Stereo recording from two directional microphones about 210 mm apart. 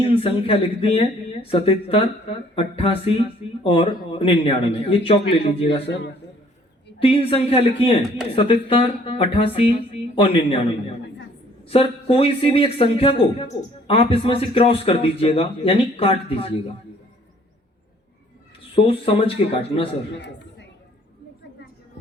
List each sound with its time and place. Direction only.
0.0 s speech: 25° left (ahead or behind)
7.0 s speech: 25° left (ahead or behind)
11.7 s speech: 25° left (ahead or behind)
18.7 s speech: 25° left (ahead or behind)